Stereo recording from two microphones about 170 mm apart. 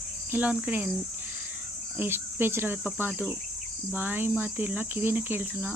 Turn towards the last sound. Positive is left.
turn(degrees=-10)  # may be behind; listen again after turning